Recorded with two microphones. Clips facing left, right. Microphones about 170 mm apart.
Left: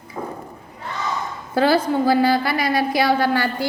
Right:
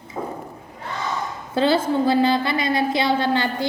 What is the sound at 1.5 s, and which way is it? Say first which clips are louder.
A woman's voice: left 1 dB; 25° right (ahead or behind).